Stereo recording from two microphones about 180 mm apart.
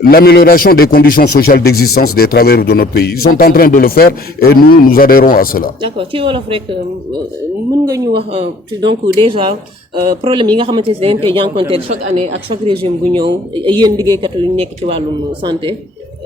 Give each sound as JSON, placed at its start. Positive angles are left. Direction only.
{"t": 0.0, "sound": "a man's voice", "side_deg": 60}
{"t": 5.8, "sound": "speech", "side_deg": -30}
{"t": 8.3, "sound": "speech", "side_deg": -30}